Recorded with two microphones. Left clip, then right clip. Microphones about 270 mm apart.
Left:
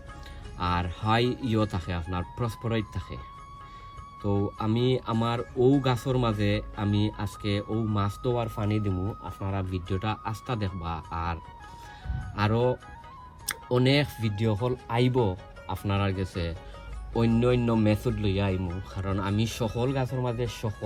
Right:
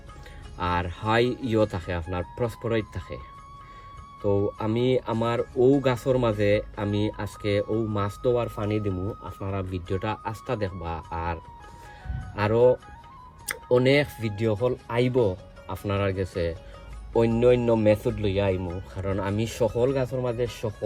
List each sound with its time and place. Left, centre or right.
0.6 s speech: centre
4.6 s speech: centre
7.6 s speech: centre
7.9 s speech: centre
12.4 s speech: centre